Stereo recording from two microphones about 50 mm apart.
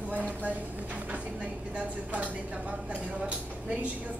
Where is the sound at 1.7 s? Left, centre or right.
Right.